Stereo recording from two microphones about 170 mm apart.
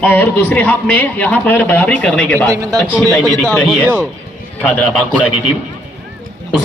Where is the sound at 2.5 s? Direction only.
20° right (ahead or behind).